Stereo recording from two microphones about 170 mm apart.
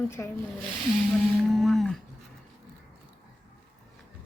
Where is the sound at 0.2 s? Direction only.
15° left (ahead or behind).